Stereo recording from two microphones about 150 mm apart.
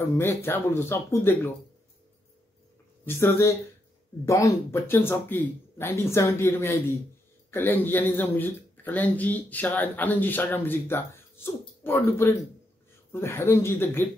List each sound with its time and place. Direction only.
0.2 s speech: 15° left (ahead or behind)
3.1 s speech: 15° left (ahead or behind)